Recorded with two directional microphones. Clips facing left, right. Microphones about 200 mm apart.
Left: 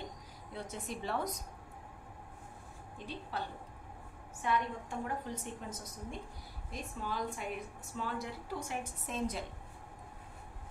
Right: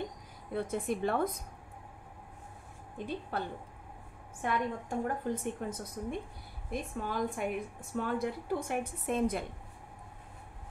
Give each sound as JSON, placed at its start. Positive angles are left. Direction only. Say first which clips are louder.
{"t": 0.5, "sound": "a woman's voice", "louder": "right 9 dB", "side_deg": -55}
{"t": 3.3, "sound": "a woman's voice", "louder": "right 4 dB", "side_deg": -55}